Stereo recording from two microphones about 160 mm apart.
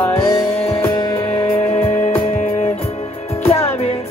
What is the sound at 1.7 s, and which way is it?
Music, 45° left (ahead or behind).